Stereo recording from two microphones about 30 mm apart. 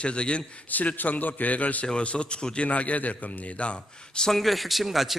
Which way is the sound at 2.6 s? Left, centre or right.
Left.